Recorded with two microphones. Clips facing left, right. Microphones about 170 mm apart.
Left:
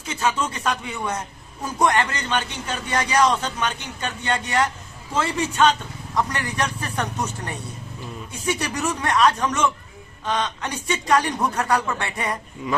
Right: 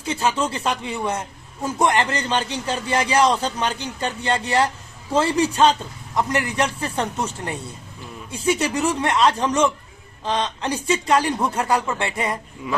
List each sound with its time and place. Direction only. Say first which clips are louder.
0.0 s a man's voice: right 2 dB; 30° right (ahead or behind)